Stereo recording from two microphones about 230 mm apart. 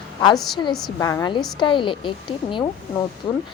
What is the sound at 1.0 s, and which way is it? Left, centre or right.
Speech, centre.